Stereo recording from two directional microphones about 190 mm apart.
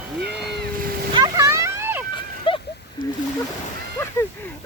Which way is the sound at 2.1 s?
25° left (ahead or behind).